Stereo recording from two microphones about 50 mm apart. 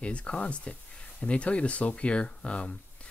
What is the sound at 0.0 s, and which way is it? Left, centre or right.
Speech, left.